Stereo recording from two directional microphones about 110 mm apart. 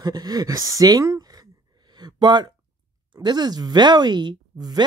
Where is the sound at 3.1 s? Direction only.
40° right (ahead or behind).